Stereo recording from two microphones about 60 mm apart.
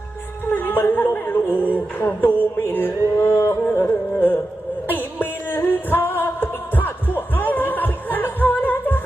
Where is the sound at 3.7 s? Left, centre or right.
Left.